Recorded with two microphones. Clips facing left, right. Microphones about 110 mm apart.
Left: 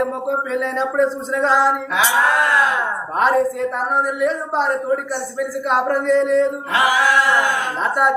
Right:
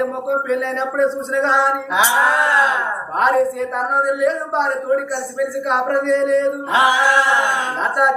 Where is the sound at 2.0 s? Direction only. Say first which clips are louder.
Right 2 dB; 20° right (ahead or behind).